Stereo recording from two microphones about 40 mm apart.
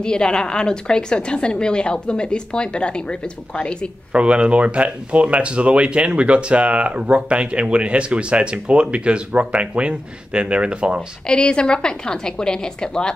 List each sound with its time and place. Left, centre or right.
0.0 s a woman's voice: left
4.1 s speech: right
11.2 s a woman's voice: left